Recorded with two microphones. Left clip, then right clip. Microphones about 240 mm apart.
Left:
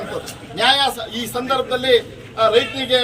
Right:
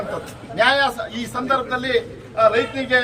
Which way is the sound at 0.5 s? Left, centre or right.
Centre.